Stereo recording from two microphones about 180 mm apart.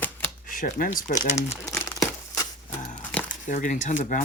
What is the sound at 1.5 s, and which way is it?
Crumpling, 15° left (ahead or behind).